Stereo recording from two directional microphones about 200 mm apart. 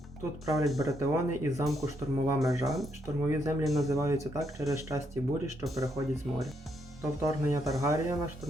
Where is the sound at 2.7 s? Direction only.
Centre (ahead or behind).